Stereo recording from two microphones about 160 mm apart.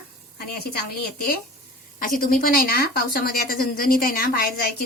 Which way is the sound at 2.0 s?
60° left (ahead or behind).